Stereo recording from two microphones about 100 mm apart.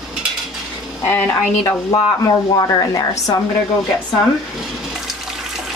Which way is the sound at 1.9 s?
40° left (ahead or behind).